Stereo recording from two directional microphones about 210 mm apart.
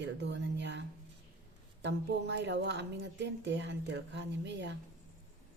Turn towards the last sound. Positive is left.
turn(degrees=-55)  # may be behind; listen again after turning